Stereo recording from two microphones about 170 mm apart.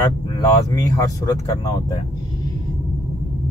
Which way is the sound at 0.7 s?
20° left (ahead or behind).